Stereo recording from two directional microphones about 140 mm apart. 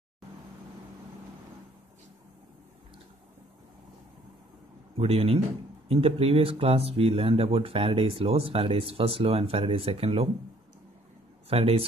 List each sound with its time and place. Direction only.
4.9 s speech: 45° right (ahead or behind)
11.4 s speech: 45° right (ahead or behind)